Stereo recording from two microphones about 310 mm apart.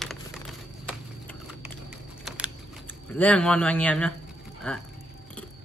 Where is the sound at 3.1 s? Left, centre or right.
Centre.